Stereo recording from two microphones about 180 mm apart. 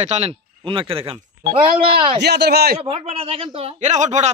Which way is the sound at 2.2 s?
65° right (ahead or behind).